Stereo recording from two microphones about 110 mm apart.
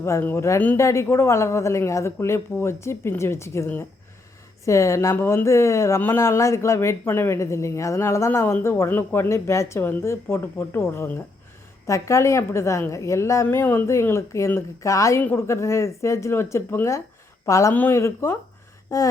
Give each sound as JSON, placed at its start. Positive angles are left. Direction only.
{"t": 0.0, "sound": "a woman's voice", "side_deg": 25}